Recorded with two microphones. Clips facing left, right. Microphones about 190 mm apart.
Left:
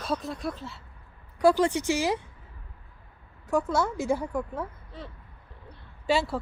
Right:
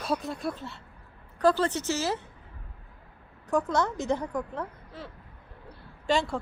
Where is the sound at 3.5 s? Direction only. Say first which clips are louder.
Even; 5° left (ahead or behind).